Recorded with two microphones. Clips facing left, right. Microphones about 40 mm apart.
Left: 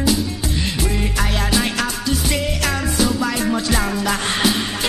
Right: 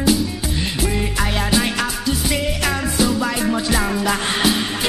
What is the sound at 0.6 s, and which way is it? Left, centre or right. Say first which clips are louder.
Music: right 1 dB; centre.